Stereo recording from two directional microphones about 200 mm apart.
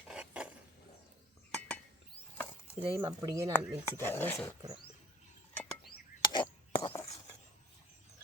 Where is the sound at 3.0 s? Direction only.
15° right (ahead or behind).